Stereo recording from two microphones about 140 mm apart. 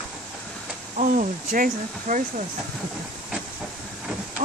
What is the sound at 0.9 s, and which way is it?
Speech, 75° right (ahead or behind).